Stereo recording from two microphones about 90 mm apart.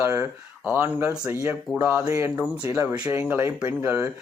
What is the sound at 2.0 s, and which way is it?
A man's voice, 35° right (ahead or behind).